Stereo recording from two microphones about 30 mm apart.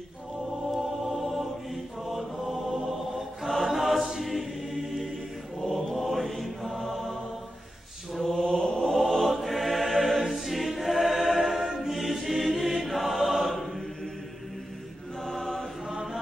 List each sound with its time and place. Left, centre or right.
0.7 s music: centre
2.0 s chant: centre
3.6 s choir: centre
5.6 s chant: centre
5.9 s mantra: centre
8.2 s mantra: centre
8.8 s music: centre
9.3 s choir: centre
11.6 s choir: centre
11.9 s choir: centre
13.5 s chant: centre
15.2 s choir: centre
15.9 s chant: centre